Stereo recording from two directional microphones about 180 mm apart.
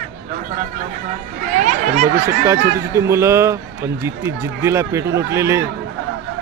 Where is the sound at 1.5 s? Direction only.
45° right (ahead or behind).